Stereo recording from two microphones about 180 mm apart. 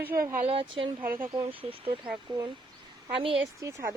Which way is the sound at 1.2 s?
20° right (ahead or behind).